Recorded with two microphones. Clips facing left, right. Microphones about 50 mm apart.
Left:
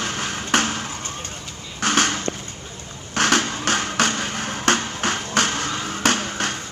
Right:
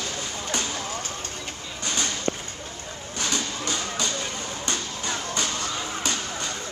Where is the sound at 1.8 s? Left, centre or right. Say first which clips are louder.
Left 7 dB; left.